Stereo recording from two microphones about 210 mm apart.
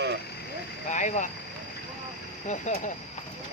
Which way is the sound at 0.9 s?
35° left (ahead or behind).